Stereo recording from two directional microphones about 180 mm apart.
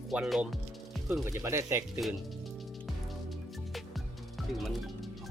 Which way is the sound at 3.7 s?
Centre (ahead or behind).